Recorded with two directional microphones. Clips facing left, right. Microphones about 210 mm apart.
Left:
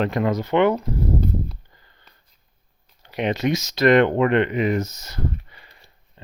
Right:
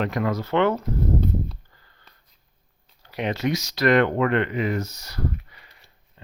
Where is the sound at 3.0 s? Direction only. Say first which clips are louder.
Left 3 dB; 20° left (ahead or behind).